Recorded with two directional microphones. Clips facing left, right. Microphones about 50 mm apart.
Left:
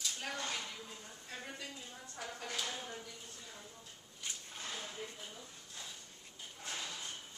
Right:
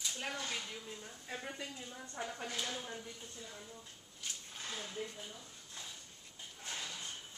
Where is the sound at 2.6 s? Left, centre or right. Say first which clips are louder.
Right 1 dB; centre.